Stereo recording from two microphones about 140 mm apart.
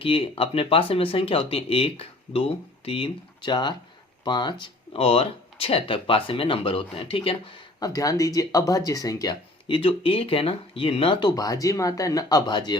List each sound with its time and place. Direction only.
0.0 s speech: 40° left (ahead or behind)
7.8 s speech: 25° left (ahead or behind)